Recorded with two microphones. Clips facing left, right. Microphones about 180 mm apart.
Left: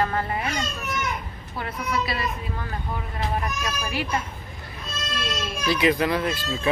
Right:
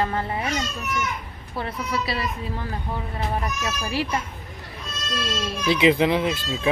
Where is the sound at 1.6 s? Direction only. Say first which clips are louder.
Even; 30° right (ahead or behind).